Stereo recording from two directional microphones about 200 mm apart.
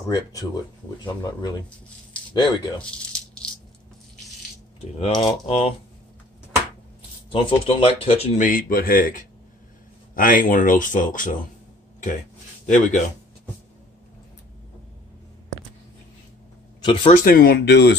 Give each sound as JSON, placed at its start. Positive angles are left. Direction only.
{"t": 2.3, "sound": "speech", "side_deg": 20}
{"t": 2.8, "sound": "a sound", "side_deg": 5}
{"t": 5.0, "sound": "speech", "side_deg": 25}
{"t": 7.3, "sound": "speech", "side_deg": 30}
{"t": 8.5, "sound": "speech", "side_deg": 45}
{"t": 12.6, "sound": "speech", "side_deg": 40}
{"t": 16.8, "sound": "speech", "side_deg": 25}
{"t": 17.1, "sound": "speech", "side_deg": 45}